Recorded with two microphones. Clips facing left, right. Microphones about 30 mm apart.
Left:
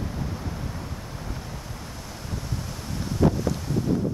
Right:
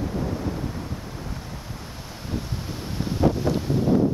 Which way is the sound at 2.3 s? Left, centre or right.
Right.